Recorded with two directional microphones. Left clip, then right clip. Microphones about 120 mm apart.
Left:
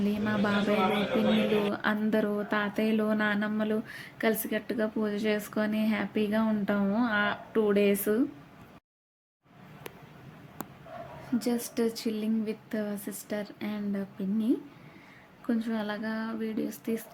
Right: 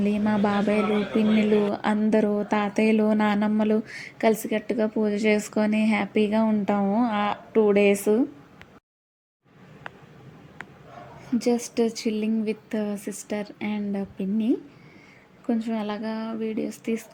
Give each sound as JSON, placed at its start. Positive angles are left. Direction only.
{"t": 0.3, "sound": "speech", "side_deg": -15}
{"t": 1.7, "sound": "a woman's voice", "side_deg": -35}
{"t": 11.3, "sound": "a woman's voice", "side_deg": -25}